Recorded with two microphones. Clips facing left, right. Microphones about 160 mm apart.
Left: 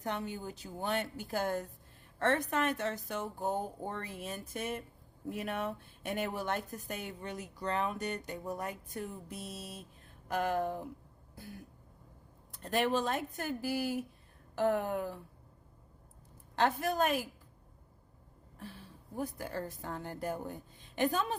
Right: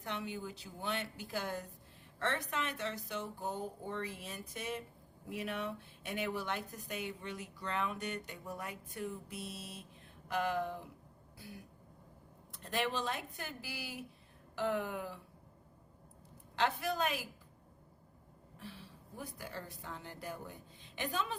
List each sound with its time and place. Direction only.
0.0 s speech: 45° left (ahead or behind)
12.6 s speech: 45° left (ahead or behind)
16.6 s speech: 50° left (ahead or behind)
18.6 s speech: 45° left (ahead or behind)